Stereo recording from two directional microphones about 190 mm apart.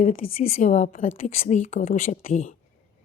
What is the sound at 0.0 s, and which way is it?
Speech, 35° left (ahead or behind).